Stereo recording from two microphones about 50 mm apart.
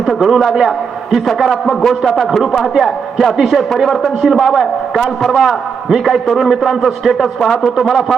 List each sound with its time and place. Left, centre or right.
0.0 s a man's voice: centre